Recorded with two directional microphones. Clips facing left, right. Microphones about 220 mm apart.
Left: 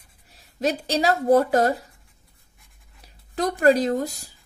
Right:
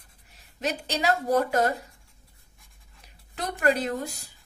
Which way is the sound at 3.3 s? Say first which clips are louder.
Left 7 dB; 40° left (ahead or behind).